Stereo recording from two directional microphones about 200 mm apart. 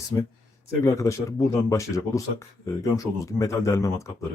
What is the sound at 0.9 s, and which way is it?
Speech, 15° left (ahead or behind).